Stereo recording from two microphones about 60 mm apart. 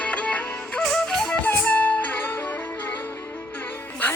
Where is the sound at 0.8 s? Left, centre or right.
Centre.